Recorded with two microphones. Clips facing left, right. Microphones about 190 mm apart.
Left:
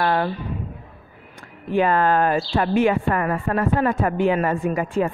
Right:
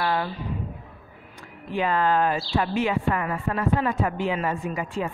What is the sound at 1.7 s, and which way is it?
Speech, 55° left (ahead or behind).